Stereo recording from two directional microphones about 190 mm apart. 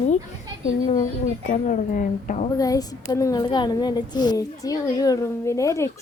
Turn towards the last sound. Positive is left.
turn(degrees=15)  # may be behind; listen again after turning